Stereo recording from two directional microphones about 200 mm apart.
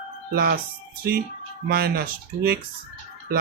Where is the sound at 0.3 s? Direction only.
50° right (ahead or behind).